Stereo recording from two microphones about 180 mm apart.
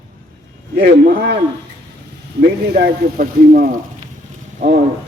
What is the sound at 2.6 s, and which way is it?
Speech, 60° right (ahead or behind).